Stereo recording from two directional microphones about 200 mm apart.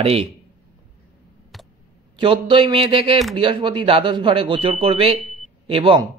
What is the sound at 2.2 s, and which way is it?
A man's voice, 25° right (ahead or behind).